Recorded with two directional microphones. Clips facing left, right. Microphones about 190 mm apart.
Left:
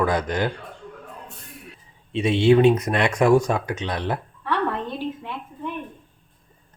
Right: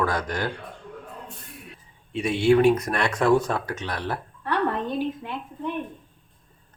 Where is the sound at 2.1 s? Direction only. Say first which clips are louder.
Left 2 dB; 25° left (ahead or behind).